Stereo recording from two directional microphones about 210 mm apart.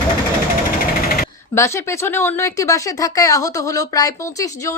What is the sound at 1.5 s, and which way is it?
Speech, 15° left (ahead or behind).